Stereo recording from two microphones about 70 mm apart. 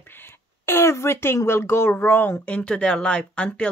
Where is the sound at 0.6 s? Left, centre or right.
Left.